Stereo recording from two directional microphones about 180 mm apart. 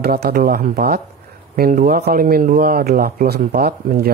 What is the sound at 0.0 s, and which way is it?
Speech, 60° right (ahead or behind).